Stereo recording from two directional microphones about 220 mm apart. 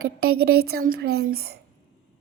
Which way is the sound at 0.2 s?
45° right (ahead or behind).